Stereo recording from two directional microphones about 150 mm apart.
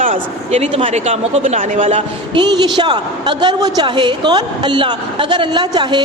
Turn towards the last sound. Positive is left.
turn(degrees=-30)  # may be behind; listen again after turning